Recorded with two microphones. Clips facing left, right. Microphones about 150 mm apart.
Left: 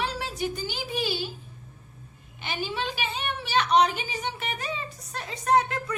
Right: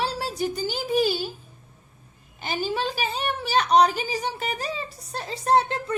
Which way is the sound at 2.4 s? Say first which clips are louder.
Right 4 dB; 40° right (ahead or behind).